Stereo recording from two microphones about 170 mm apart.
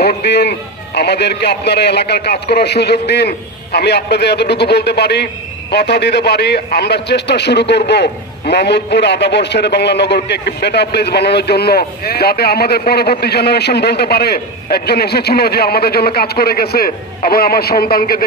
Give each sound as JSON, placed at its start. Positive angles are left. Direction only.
{"t": 0.2, "sound": "a man's voice", "side_deg": 75}